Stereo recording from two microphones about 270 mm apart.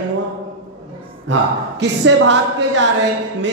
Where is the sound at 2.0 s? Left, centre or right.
Right.